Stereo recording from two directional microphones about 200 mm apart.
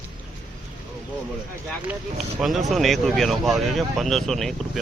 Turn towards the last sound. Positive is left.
turn(degrees=0)  # may be behind; listen again after turning